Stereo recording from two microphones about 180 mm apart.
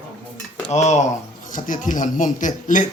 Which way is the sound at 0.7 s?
40° left (ahead or behind).